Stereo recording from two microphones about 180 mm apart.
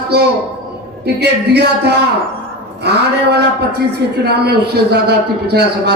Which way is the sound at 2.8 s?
65° right (ahead or behind).